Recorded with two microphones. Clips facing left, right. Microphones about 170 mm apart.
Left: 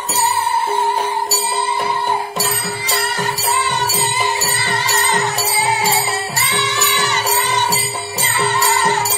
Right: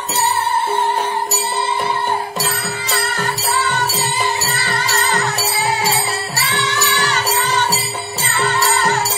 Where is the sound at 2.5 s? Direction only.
20° left (ahead or behind).